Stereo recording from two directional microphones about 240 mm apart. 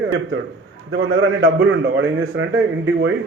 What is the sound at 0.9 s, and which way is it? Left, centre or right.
A man's voice, right.